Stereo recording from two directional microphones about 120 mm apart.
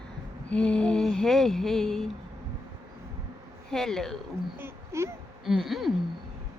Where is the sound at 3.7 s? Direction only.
5° left (ahead or behind).